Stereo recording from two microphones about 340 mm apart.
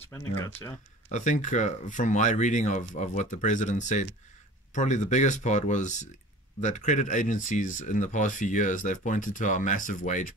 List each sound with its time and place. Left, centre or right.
0.0 s speech: centre
1.0 s speech: left